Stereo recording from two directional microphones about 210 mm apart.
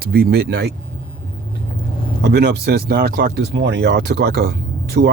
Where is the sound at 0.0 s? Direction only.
50° right (ahead or behind).